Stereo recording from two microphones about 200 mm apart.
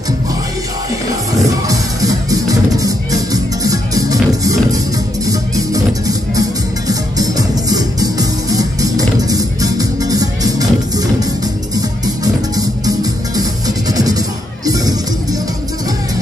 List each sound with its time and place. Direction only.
1.7 s music: 15° right (ahead or behind)
12.5 s music: 20° right (ahead or behind)